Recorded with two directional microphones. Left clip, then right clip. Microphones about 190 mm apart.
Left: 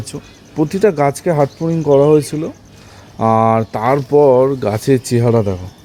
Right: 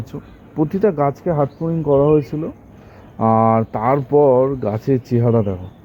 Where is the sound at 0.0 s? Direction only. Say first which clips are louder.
Left 4 dB; 15° left (ahead or behind).